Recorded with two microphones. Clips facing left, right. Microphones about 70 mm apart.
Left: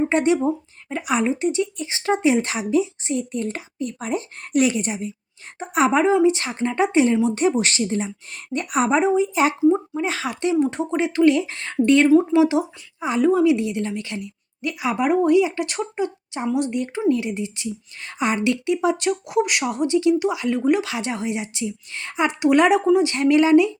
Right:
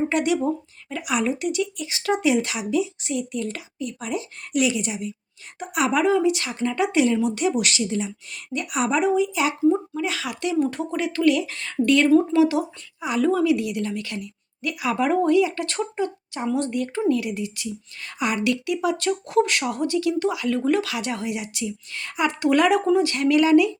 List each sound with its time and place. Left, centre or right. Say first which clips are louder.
0.0 s speech: left 3 dB; left
9.6 s speech: left 2 dB; centre
10.0 s speech: left 3 dB; left
12.0 s speech: left 2 dB; centre